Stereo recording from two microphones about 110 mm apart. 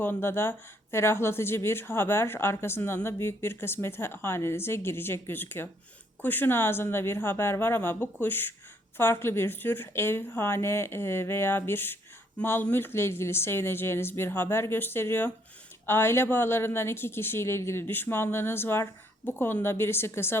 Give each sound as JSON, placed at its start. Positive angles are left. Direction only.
{"t": 0.0, "sound": "speech", "side_deg": 20}